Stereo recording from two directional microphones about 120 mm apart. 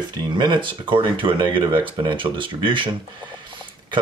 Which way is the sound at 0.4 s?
40° right (ahead or behind).